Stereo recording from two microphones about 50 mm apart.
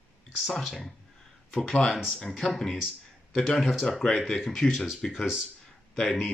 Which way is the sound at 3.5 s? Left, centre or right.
Centre.